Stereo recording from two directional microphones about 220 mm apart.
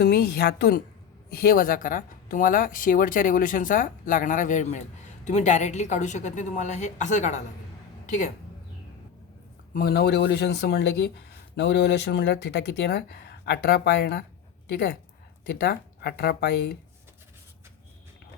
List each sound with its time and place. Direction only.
0.0 s a woman's voice: 45° left (ahead or behind)
9.7 s speech: 45° left (ahead or behind)